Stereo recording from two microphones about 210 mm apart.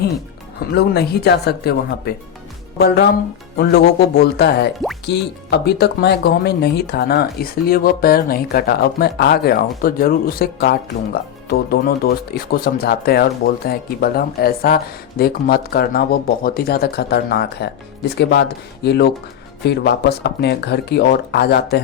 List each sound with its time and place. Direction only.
0.7 s speech: 50° left (ahead or behind)